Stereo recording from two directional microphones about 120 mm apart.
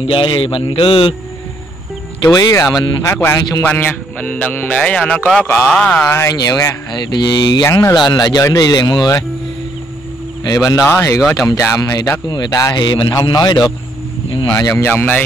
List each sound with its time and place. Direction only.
0.0 s a man's voice: 45° left (ahead or behind)
2.2 s a man's voice: 30° left (ahead or behind); by 6.1 s 10° left (ahead or behind)
6.1 s speech: 30° left (ahead or behind)
10.4 s speech: 30° left (ahead or behind)
12.8 s speech: 40° left (ahead or behind)
14.6 s speech: 25° left (ahead or behind)
14.9 s a man's voice: 15° left (ahead or behind)